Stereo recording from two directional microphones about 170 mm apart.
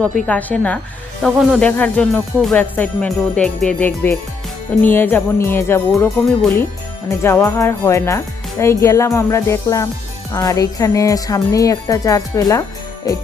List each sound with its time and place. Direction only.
0.3 s music: 10° left (ahead or behind)
5.9 s speech: centre (ahead or behind)
7.1 s music: 15° left (ahead or behind)